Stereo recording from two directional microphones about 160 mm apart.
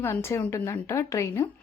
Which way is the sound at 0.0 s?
15° left (ahead or behind).